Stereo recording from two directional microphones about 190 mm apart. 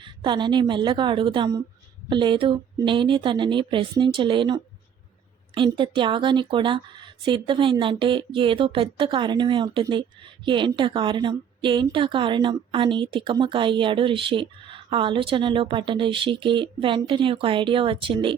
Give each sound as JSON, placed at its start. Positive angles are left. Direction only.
{"t": 0.0, "sound": "a woman's voice", "side_deg": -25}